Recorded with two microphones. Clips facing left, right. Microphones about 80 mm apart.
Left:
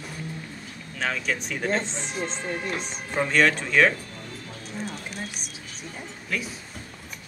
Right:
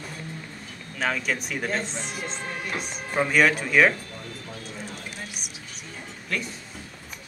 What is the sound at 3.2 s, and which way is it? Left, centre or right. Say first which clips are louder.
Speech: right 1 dB; centre.